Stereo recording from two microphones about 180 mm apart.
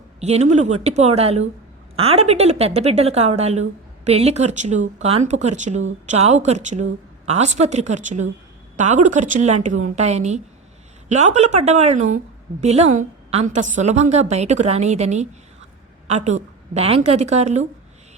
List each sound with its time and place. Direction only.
0.2 s a woman's voice: 35° right (ahead or behind)